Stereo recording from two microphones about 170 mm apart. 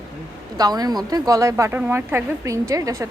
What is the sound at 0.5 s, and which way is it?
A woman's voice, 20° right (ahead or behind).